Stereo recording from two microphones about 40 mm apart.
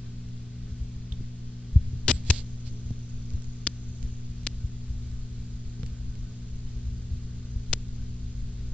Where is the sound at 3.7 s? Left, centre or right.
Left.